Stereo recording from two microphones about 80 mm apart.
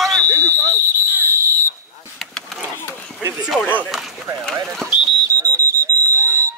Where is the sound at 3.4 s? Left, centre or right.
Centre.